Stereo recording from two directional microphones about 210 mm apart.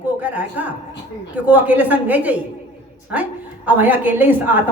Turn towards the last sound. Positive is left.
turn(degrees=-10)  # may be behind; listen again after turning